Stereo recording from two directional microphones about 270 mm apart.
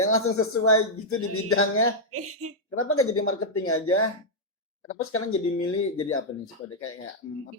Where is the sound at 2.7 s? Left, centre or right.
Left.